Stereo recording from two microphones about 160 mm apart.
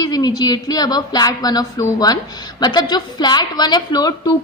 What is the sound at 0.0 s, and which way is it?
A woman's voice, 25° left (ahead or behind).